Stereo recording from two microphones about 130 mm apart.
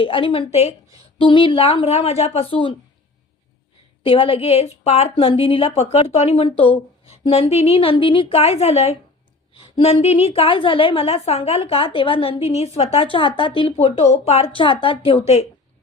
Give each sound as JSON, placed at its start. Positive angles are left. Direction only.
{"t": 0.0, "sound": "a woman's voice", "side_deg": 40}
{"t": 1.2, "sound": "a woman's voice", "side_deg": 40}
{"t": 4.0, "sound": "a woman's voice", "side_deg": 45}